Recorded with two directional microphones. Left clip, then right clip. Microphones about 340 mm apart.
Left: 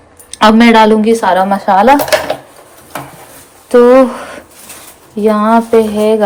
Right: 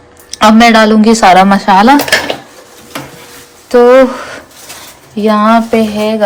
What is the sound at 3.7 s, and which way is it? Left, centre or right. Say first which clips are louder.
Speech: right 1 dB; centre.